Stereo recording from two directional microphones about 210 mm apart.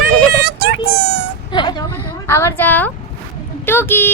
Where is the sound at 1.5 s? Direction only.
20° left (ahead or behind).